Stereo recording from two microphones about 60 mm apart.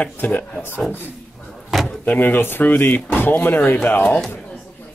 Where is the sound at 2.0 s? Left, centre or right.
Left.